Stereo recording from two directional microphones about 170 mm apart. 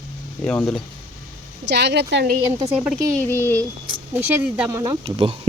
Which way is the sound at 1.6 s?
85° right.